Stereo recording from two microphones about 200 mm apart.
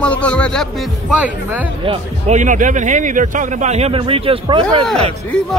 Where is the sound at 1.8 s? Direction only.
35° right (ahead or behind).